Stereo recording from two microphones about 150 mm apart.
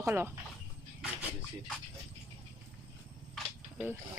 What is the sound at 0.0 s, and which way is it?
Speech, 15° right (ahead or behind).